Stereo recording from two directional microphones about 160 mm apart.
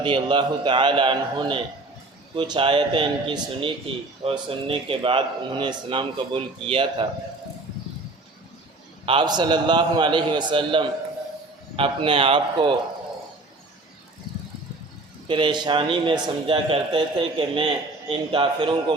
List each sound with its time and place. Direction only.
0.0 s a man's voice: 30° right (ahead or behind)
9.0 s a man's voice: 30° right (ahead or behind)
15.3 s a man's voice: 30° right (ahead or behind)